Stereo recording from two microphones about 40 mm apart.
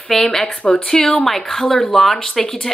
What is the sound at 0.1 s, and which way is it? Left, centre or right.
Speech, centre.